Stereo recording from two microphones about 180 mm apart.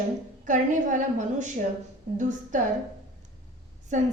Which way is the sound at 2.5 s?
45° right (ahead or behind).